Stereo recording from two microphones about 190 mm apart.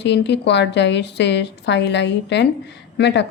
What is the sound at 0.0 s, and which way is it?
Speech, 65° left (ahead or behind).